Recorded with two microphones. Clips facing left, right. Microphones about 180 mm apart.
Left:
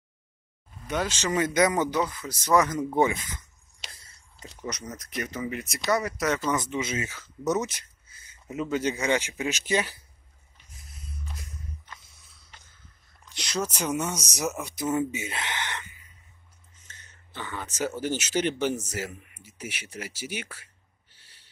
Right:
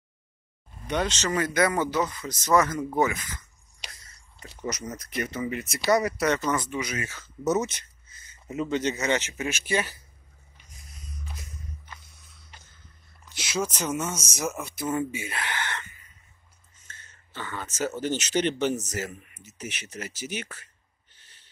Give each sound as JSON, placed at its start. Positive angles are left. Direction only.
{"t": 0.8, "sound": "speech", "side_deg": 5}
{"t": 3.9, "sound": "a sound", "side_deg": 30}
{"t": 4.5, "sound": "speech", "side_deg": -5}
{"t": 5.9, "sound": "speech", "side_deg": -15}
{"t": 6.1, "sound": "speech", "side_deg": 5}
{"t": 6.5, "sound": "speech", "side_deg": 20}
{"t": 7.4, "sound": "speech", "side_deg": 0}
{"t": 13.2, "sound": "a sound", "side_deg": -5}
{"t": 13.7, "sound": "speech", "side_deg": 10}
{"t": 16.8, "sound": "a sound", "side_deg": 15}
{"t": 17.7, "sound": "speech", "side_deg": 10}